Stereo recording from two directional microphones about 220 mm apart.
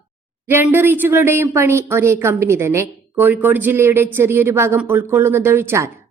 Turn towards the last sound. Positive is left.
turn(degrees=-10)  # may be behind; listen again after turning